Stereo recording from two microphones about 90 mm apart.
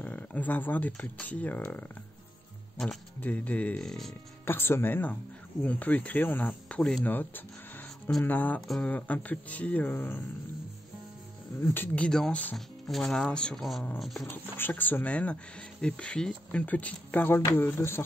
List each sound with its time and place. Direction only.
0.0 s speech: 20° left (ahead or behind)
3.2 s speech: 15° left (ahead or behind)
4.5 s speech: 25° left (ahead or behind)
8.5 s speech: 5° left (ahead or behind)
8.8 s speech: 15° left (ahead or behind)
11.6 s speech: 25° left (ahead or behind)
12.5 s speech: centre (ahead or behind)
14.2 s speech: 25° left (ahead or behind)